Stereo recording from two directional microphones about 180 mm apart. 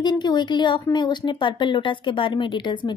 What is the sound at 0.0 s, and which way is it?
Speech, 25° left (ahead or behind).